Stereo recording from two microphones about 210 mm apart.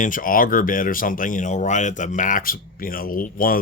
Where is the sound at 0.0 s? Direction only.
40° left (ahead or behind).